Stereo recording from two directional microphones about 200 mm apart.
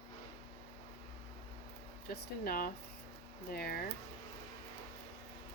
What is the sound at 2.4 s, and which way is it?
Speech, 50° left (ahead or behind).